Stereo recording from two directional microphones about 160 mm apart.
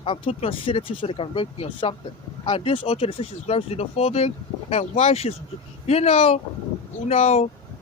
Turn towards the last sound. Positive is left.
turn(degrees=40)  # may be behind; listen again after turning